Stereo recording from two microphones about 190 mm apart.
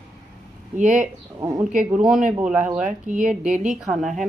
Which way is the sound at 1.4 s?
15° right (ahead or behind).